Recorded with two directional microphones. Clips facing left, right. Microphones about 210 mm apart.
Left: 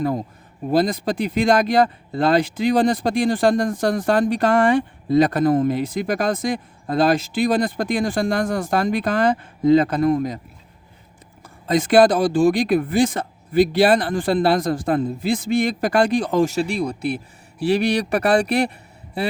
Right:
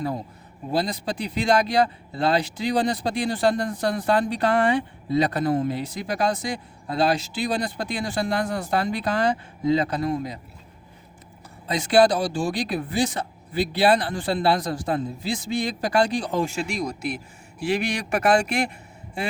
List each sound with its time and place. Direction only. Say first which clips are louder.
0.8 s speech: left 6 dB; 50° left (ahead or behind)
11.7 s speech: left 4 dB; 50° left (ahead or behind)
16.6 s speech: left 5 dB; 35° left (ahead or behind)